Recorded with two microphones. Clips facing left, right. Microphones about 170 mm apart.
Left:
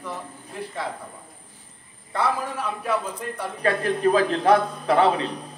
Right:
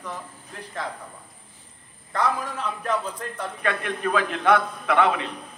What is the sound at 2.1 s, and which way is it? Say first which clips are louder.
A man's voice: left 1 dB; 10° left (ahead or behind).